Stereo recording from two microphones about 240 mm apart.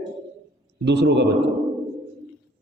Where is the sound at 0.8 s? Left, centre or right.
Right.